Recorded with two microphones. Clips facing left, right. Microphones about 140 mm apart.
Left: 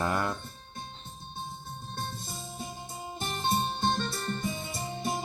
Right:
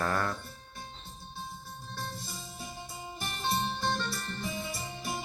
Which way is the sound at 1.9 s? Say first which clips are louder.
Left 2 dB; 25° left (ahead or behind).